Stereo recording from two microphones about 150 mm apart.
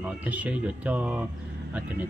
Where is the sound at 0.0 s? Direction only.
10° right (ahead or behind).